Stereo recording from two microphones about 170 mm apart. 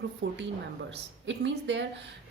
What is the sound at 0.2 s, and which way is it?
Speech, 90° right.